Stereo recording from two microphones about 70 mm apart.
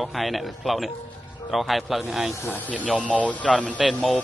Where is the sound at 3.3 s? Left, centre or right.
Centre.